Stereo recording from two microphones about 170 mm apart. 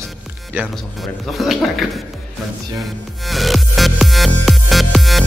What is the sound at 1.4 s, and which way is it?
Speech, centre (ahead or behind).